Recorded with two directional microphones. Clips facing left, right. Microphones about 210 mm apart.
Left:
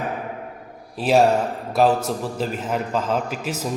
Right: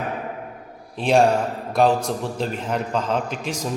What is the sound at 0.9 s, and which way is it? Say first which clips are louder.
A man's voice: even; 5° left (ahead or behind).